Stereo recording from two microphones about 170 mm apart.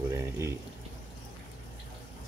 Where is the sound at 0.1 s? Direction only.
15° right (ahead or behind).